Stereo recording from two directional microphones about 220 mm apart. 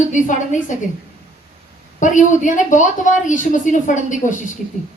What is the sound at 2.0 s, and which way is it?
A woman's voice, 35° left (ahead or behind).